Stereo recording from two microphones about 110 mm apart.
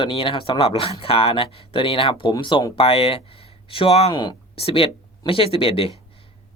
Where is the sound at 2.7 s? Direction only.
60° left (ahead or behind).